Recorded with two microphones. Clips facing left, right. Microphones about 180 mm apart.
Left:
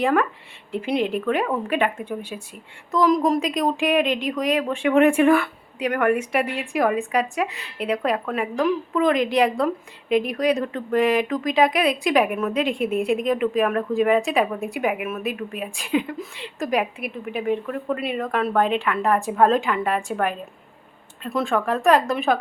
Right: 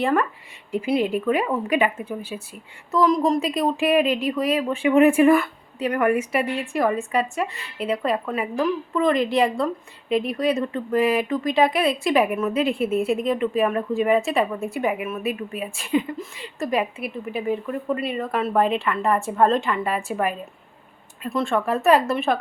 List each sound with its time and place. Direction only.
0.0 s a woman's voice: centre (ahead or behind)